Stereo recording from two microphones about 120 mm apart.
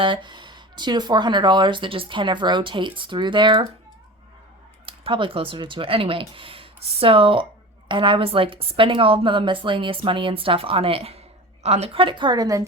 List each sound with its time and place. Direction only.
0.0 s speech: 40° right (ahead or behind)
4.9 s a woman's voice: 45° right (ahead or behind); by 12.6 s 30° right (ahead or behind)